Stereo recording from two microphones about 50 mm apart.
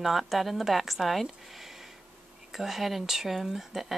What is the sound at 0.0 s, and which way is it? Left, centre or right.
A woman's voice, centre.